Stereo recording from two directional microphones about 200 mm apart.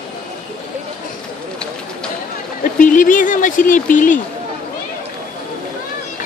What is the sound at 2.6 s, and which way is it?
Speech, 40° left (ahead or behind).